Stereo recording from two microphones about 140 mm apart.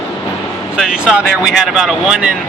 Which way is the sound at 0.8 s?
5° right (ahead or behind).